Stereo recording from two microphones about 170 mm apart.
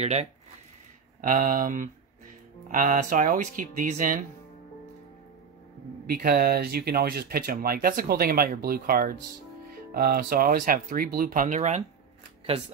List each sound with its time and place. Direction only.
0.0 s speech: 40° right (ahead or behind)
1.2 s speech: 50° right (ahead or behind)
6.0 s speech: 65° right (ahead or behind); by 11.8 s 45° right (ahead or behind)